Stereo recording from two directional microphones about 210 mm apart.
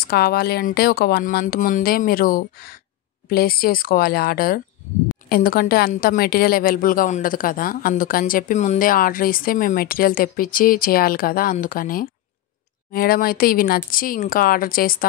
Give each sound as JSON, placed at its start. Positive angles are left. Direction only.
{"t": 0.0, "sound": "a woman's voice", "side_deg": 45}